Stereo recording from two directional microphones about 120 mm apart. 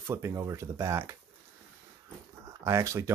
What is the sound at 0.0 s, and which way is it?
Speech, 20° right (ahead or behind).